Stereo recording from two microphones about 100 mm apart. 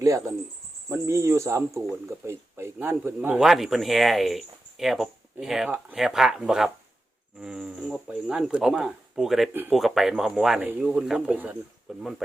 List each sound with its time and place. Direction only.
0.0 s speech: 30° right (ahead or behind)
3.3 s speech: 5° right (ahead or behind)
9.5 s speech: 20° right (ahead or behind)
9.7 s speech: 5° right (ahead or behind)
10.6 s speech: 20° right (ahead or behind)
11.0 s speech: 5° right (ahead or behind)